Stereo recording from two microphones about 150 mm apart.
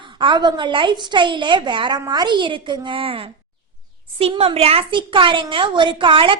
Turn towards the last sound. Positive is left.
turn(degrees=-35)  # may be behind; listen again after turning